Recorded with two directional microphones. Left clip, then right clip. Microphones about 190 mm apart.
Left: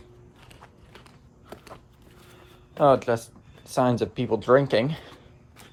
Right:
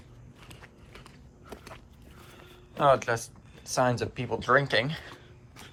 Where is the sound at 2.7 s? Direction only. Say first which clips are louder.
Left 4 dB; 35° left (ahead or behind).